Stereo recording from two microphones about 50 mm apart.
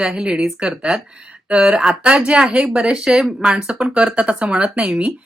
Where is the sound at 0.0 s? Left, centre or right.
Centre.